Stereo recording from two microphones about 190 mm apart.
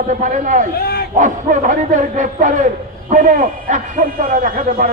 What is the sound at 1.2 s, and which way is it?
A man's voice, 40° right (ahead or behind).